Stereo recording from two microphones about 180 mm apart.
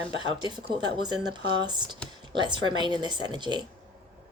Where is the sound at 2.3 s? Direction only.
25° right (ahead or behind).